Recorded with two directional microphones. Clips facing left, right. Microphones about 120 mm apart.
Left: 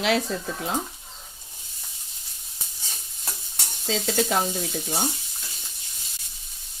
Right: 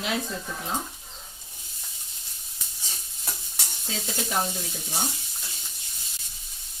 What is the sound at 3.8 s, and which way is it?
Speech, 90° left.